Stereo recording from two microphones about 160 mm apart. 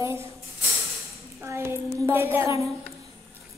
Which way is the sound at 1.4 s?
15° right (ahead or behind).